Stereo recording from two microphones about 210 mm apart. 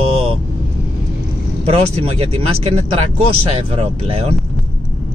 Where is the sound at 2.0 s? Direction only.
30° right (ahead or behind).